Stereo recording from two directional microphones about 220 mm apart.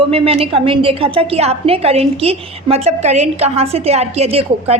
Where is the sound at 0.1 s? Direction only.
25° right (ahead or behind).